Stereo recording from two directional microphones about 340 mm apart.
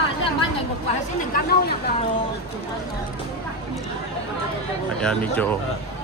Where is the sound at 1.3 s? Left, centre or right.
Left.